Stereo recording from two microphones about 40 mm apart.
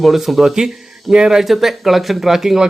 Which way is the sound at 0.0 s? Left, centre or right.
Centre.